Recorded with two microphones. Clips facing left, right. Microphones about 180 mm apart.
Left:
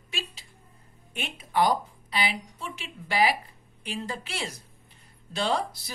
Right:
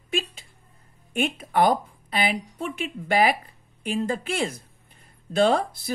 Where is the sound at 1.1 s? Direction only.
50° right (ahead or behind).